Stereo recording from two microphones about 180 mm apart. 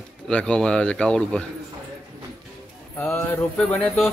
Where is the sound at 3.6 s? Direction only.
5° left (ahead or behind).